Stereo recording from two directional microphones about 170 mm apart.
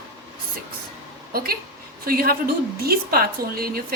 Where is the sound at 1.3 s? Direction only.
65° right (ahead or behind).